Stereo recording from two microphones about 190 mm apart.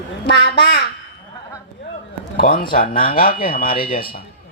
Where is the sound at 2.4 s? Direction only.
55° left (ahead or behind).